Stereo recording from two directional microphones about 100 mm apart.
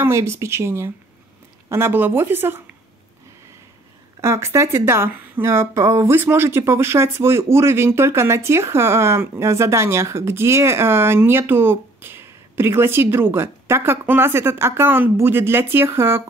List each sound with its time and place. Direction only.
0.0 s speech: 25° right (ahead or behind)
4.2 s speech: 25° right (ahead or behind)